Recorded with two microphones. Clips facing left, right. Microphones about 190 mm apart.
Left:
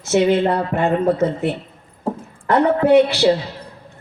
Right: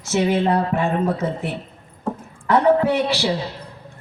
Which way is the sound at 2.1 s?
35° left (ahead or behind).